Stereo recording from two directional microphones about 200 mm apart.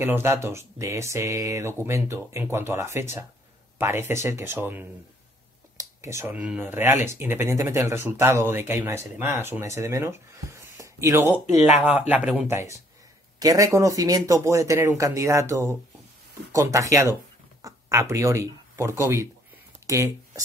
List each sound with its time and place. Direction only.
0.0 s speech: 10° right (ahead or behind)